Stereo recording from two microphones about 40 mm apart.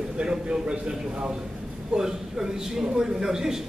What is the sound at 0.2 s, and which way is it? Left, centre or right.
A man's voice, right.